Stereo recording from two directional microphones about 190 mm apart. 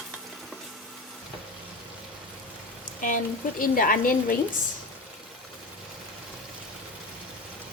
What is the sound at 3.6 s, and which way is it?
Speech, 50° left (ahead or behind).